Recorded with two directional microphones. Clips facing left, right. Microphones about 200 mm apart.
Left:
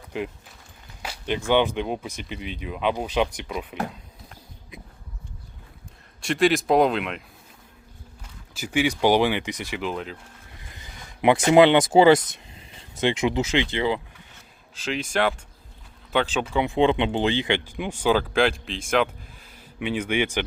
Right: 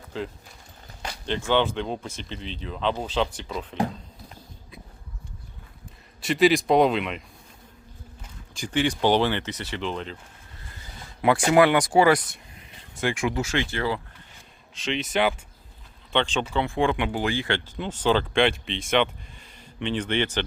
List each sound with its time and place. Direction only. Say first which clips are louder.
0.1 s speech: left 2 dB; 15° left (ahead or behind)
6.2 s speech: right 1 dB; centre (ahead or behind)
8.5 s speech: left 1 dB; 10° left (ahead or behind)
10.6 s speech: right 2 dB; 15° left (ahead or behind)
14.8 s speech: even; centre (ahead or behind)